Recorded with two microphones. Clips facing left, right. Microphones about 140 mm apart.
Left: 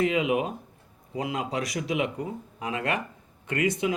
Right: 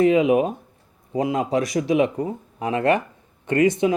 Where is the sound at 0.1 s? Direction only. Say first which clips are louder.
Right 8 dB; 45° right (ahead or behind).